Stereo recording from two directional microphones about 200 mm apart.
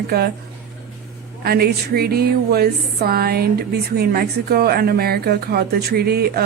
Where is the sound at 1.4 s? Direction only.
50° right (ahead or behind).